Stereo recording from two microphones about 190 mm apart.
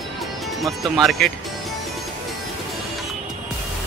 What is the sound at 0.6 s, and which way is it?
Speech, centre (ahead or behind).